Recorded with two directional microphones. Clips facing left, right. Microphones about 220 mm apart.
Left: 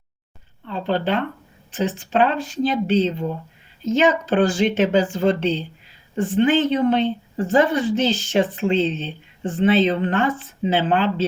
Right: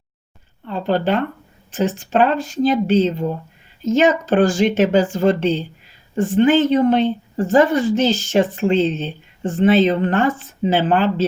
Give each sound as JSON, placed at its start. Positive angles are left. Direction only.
{"t": 0.7, "sound": "a woman's voice", "side_deg": -45}